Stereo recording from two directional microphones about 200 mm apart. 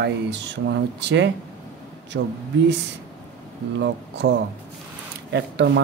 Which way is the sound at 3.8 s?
60° right (ahead or behind).